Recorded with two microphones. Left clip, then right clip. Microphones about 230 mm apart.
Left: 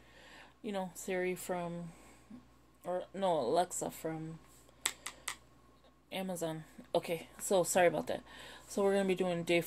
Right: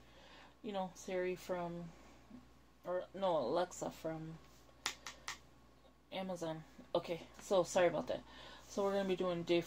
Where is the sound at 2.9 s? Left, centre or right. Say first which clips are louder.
Left 3 dB; left.